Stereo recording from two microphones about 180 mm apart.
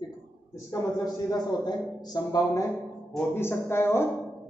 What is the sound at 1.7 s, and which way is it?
Speech, 20° left (ahead or behind).